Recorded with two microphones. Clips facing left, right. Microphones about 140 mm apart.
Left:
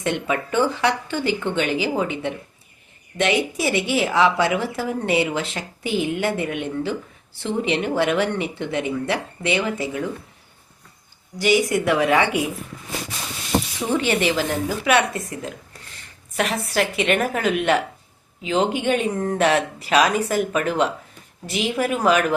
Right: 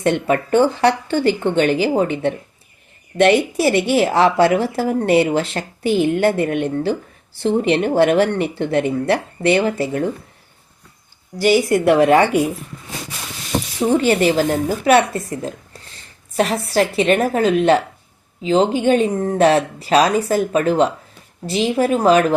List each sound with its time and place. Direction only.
0.0 s speech: 45° right (ahead or behind)
11.3 s speech: 45° right (ahead or behind)
13.7 s speech: 40° right (ahead or behind)